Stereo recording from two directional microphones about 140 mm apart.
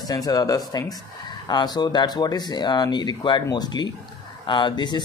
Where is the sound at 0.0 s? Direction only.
25° left (ahead or behind).